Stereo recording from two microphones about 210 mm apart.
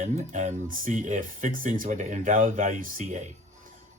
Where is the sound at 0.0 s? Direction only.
35° right (ahead or behind).